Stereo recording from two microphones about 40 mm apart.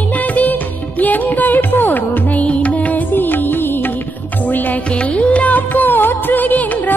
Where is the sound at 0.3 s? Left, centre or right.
Left.